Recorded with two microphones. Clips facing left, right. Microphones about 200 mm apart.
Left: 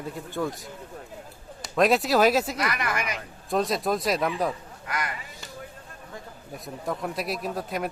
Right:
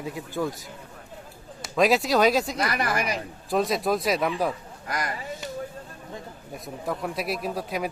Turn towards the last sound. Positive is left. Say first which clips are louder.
# right 1 dB
turn(degrees=0)  # may be behind; listen again after turning